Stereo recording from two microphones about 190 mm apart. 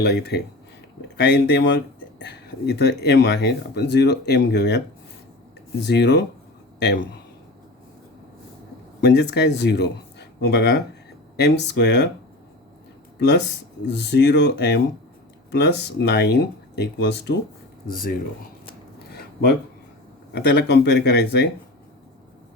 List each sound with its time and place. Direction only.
0.0 s speech: 60° left (ahead or behind)
5.8 s a man's voice: 65° left (ahead or behind)
9.0 s speech: 60° left (ahead or behind)
13.1 s speech: 65° left (ahead or behind)
17.8 s speech: 50° left (ahead or behind)
20.3 s speech: 60° left (ahead or behind)